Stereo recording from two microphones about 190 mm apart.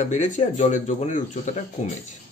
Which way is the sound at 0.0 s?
40° left (ahead or behind).